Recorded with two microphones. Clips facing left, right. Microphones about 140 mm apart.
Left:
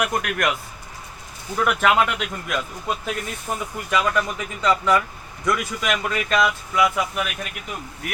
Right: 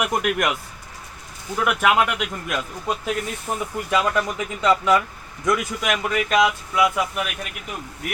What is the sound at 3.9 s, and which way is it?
Speech, 25° right (ahead or behind).